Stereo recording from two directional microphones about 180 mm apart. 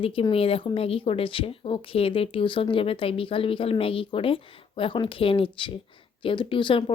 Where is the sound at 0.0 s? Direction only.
30° left (ahead or behind).